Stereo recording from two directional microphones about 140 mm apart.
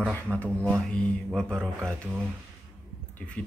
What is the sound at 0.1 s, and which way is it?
Speech, 10° left (ahead or behind).